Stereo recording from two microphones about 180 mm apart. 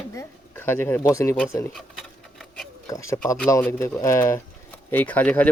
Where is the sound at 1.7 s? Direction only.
Centre (ahead or behind).